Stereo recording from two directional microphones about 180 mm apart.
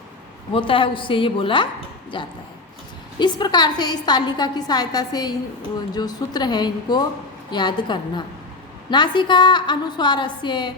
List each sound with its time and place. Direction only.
0.5 s a woman's voice: 30° left (ahead or behind)